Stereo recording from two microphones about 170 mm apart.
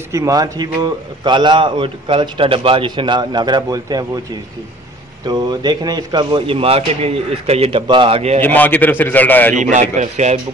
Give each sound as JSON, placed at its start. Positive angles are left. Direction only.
{"t": 0.1, "sound": "a man's voice", "side_deg": -20}
{"t": 5.2, "sound": "a man's voice", "side_deg": -25}
{"t": 8.4, "sound": "a man's voice", "side_deg": 10}
{"t": 9.6, "sound": "speech", "side_deg": -45}